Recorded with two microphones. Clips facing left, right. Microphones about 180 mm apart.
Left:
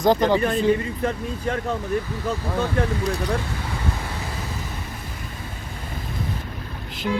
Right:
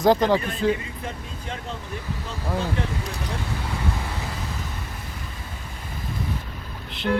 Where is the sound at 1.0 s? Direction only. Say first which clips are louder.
Left 9 dB; 60° left (ahead or behind).